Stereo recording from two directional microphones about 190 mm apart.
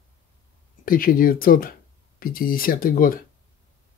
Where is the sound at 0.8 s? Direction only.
50° left (ahead or behind).